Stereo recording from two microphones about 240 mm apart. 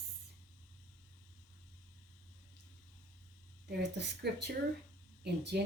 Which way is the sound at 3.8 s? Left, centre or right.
Right.